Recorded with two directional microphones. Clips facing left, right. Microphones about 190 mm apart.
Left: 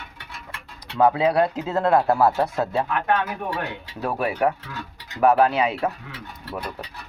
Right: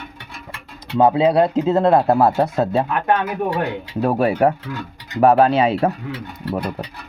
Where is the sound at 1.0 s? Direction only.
25° right (ahead or behind).